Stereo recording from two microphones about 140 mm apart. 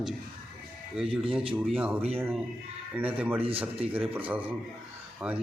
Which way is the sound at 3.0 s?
10° right (ahead or behind).